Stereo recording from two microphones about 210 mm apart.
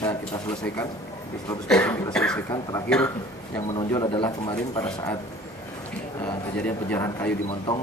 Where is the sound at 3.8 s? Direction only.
20° left (ahead or behind).